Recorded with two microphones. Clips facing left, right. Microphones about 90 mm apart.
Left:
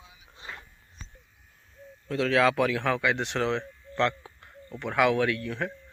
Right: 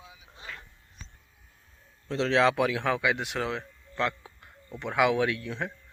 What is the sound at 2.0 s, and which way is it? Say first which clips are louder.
Speech: even; 25° right (ahead or behind).